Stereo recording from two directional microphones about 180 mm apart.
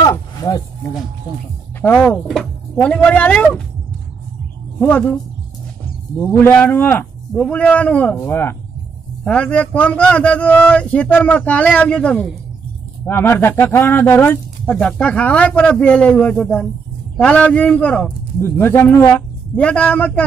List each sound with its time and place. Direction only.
0.0 s a sound: 20° left (ahead or behind)
1.8 s speech: 10° left (ahead or behind)
4.7 s speech: 10° left (ahead or behind)
6.2 s speech: 10° left (ahead or behind)